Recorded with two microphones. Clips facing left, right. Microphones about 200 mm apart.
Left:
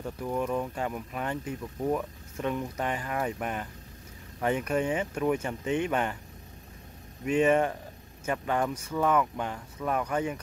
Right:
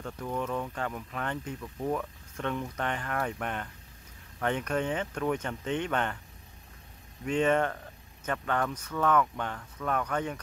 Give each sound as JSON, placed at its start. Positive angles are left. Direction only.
{"t": 0.0, "sound": "speech", "side_deg": 10}
{"t": 7.2, "sound": "speech", "side_deg": 10}